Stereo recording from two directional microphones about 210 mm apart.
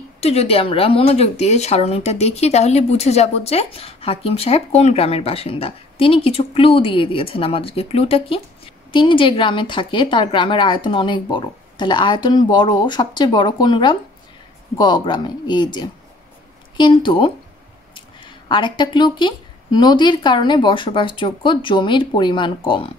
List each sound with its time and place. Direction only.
0.2 s speech: 30° left (ahead or behind)